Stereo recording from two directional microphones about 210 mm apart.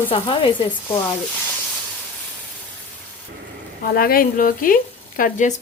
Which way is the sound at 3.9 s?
45° left (ahead or behind).